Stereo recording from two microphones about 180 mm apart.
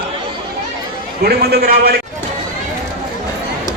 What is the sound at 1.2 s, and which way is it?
Speech, 60° right (ahead or behind).